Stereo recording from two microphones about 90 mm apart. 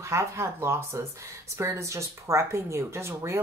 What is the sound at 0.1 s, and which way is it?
Speech, 30° right (ahead or behind).